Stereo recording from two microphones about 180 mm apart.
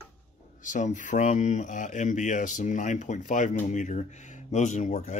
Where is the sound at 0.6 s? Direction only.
45° left (ahead or behind).